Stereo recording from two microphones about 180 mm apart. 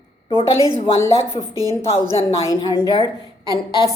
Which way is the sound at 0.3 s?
25° right (ahead or behind).